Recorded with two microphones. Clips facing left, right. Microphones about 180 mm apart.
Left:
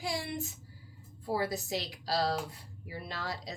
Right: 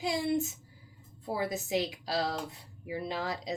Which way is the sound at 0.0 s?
20° right (ahead or behind).